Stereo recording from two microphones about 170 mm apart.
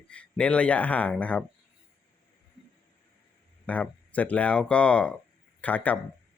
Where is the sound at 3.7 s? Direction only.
10° left (ahead or behind).